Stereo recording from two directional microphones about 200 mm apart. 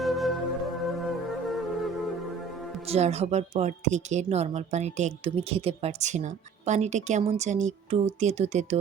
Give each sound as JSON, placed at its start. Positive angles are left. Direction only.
{"t": 0.0, "sound": "music", "side_deg": 0}
{"t": 2.8, "sound": "speech", "side_deg": -30}